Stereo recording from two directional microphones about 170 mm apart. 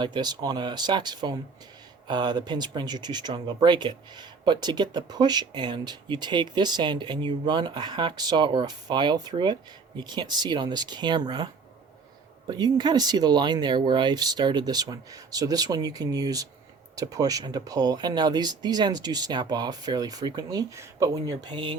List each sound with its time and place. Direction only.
0.0 s speech: 25° right (ahead or behind)
12.5 s speech: 25° right (ahead or behind)